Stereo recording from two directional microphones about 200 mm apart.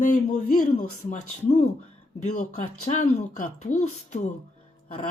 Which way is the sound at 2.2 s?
35° left (ahead or behind).